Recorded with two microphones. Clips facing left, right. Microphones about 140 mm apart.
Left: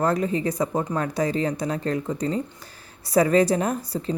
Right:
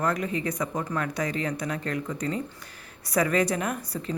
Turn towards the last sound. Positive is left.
turn(degrees=30)  # may be behind; listen again after turning